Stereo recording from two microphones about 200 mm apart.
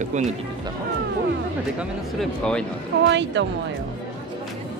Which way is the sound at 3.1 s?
65° right (ahead or behind).